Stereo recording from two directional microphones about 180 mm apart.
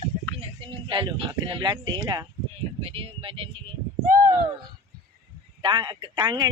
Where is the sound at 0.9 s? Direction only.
30° right (ahead or behind).